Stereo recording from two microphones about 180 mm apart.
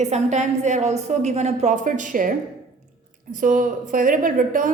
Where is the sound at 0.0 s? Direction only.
40° right (ahead or behind).